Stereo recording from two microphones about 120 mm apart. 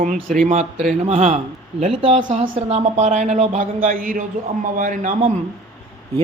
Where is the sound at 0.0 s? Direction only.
90° right.